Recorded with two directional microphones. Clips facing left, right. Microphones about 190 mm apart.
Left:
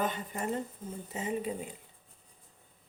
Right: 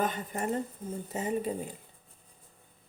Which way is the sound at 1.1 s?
40° right (ahead or behind).